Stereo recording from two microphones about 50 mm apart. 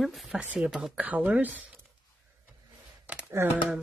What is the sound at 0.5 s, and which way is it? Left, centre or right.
Speech, right.